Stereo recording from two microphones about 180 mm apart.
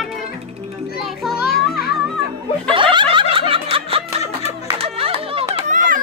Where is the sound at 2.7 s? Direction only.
30° right (ahead or behind).